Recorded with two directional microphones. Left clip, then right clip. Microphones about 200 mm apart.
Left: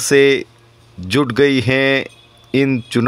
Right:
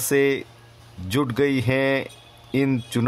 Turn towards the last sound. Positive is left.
turn(degrees=15)  # may be behind; listen again after turning